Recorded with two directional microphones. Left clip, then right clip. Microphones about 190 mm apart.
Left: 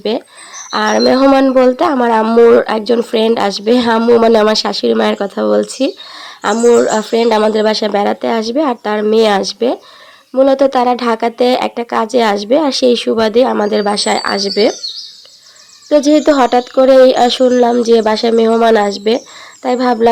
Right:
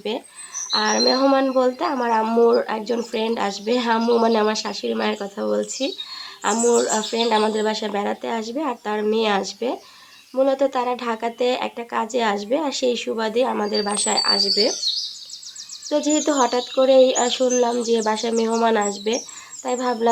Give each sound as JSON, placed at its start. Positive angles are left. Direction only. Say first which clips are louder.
{"t": 0.0, "sound": "speech", "louder": "left 10 dB", "side_deg": 40}
{"t": 15.9, "sound": "speech", "louder": "left 11 dB", "side_deg": 35}